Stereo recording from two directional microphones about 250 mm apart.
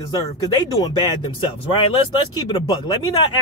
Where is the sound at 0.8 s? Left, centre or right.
Centre.